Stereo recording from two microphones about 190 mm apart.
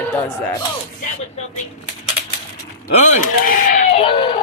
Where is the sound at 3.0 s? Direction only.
45° left (ahead or behind); by 4.4 s 25° left (ahead or behind).